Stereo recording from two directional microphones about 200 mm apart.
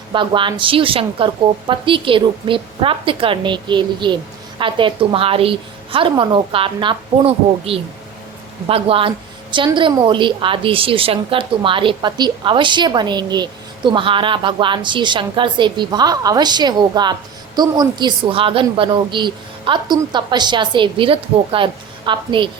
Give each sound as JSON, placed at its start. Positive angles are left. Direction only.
{"t": 0.1, "sound": "a woman's voice", "side_deg": -25}